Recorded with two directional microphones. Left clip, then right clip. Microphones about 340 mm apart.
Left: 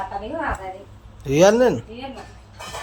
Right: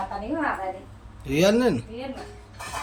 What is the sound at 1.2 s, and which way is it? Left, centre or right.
Speech, centre.